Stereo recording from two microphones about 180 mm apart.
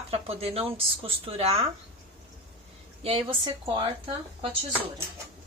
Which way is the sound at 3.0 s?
30° right (ahead or behind).